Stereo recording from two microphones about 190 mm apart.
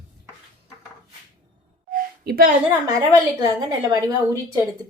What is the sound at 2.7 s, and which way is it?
A woman's voice, 20° right (ahead or behind).